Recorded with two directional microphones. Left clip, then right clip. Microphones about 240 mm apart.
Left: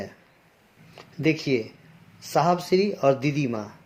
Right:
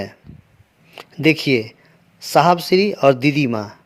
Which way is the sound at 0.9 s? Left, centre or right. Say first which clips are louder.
Right 8 dB; right.